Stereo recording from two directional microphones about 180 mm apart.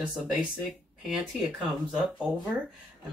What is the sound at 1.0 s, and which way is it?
Speech, centre (ahead or behind).